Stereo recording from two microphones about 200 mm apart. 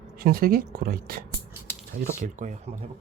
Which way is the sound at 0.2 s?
50° right (ahead or behind).